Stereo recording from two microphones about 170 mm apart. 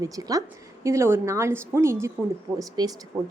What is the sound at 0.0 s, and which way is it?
A woman's voice, 20° right (ahead or behind).